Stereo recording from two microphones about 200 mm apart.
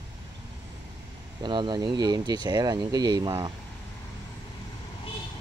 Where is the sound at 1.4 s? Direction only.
25° right (ahead or behind).